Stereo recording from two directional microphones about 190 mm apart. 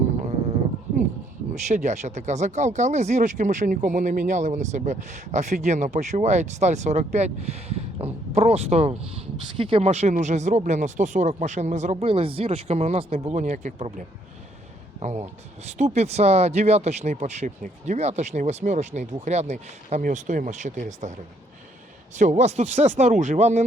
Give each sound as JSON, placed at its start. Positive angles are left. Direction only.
{"t": 1.5, "sound": "speech", "side_deg": -40}
{"t": 15.6, "sound": "speech", "side_deg": -35}
{"t": 22.2, "sound": "speech", "side_deg": -35}